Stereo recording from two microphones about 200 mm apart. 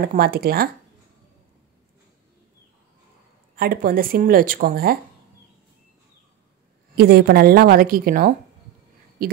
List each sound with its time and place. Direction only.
0.0 s speech: 50° right (ahead or behind)
3.5 s speech: 50° right (ahead or behind)
7.0 s speech: 50° right (ahead or behind)